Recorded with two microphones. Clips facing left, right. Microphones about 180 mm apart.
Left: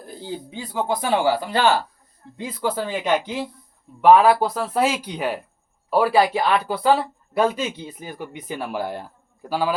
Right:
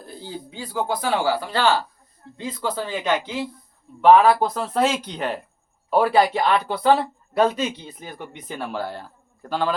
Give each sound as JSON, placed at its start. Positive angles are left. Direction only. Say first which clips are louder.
{"t": 0.0, "sound": "speech", "louder": "left 3 dB", "side_deg": 15}